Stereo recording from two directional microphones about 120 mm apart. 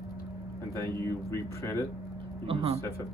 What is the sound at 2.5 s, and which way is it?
Speech, 55° right (ahead or behind).